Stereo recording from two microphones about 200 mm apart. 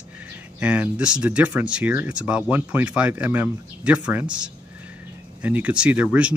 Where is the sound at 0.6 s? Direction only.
5° right (ahead or behind).